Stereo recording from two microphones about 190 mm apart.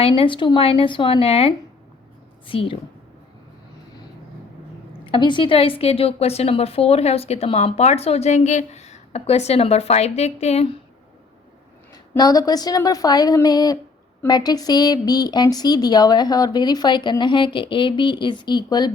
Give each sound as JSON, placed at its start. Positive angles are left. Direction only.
{"t": 0.0, "sound": "a woman's voice", "side_deg": 30}
{"t": 5.1, "sound": "a woman's voice", "side_deg": 25}
{"t": 12.1, "sound": "a woman's voice", "side_deg": 20}